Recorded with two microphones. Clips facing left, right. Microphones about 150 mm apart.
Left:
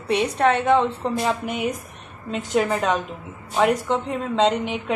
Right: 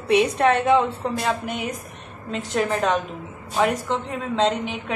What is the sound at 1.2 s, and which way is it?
A woman's voice, centre (ahead or behind).